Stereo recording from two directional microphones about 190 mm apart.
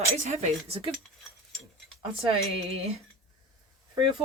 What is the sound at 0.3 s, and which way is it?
Speech, 35° right (ahead or behind).